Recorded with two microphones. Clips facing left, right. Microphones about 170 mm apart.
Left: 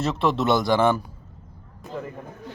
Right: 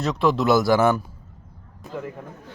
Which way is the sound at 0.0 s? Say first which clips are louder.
Right 2 dB; centre (ahead or behind).